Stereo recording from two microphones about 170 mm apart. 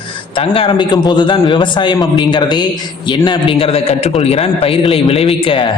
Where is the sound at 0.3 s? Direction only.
30° left (ahead or behind).